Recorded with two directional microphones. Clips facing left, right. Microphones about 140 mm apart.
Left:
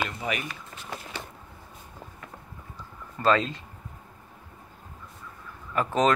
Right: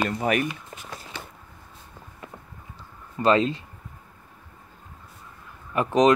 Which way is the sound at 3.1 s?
20° right (ahead or behind).